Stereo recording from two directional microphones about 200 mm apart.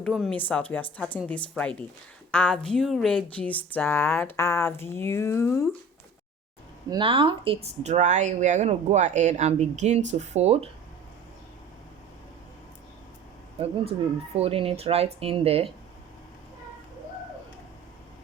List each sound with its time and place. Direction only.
0.0 s speech: 5° left (ahead or behind)
6.9 s speech: 25° right (ahead or behind)
14.3 s speech: 30° right (ahead or behind)